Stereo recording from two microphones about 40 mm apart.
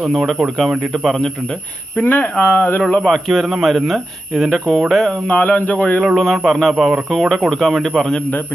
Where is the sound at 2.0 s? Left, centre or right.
Left.